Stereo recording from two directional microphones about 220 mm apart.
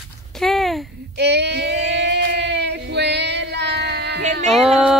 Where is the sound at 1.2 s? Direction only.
50° right (ahead or behind).